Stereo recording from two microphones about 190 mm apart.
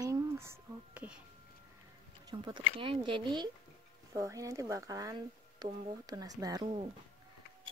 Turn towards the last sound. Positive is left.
turn(degrees=-25)  # may be behind; listen again after turning